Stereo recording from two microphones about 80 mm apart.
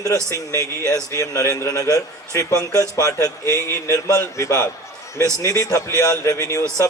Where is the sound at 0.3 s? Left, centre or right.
Left.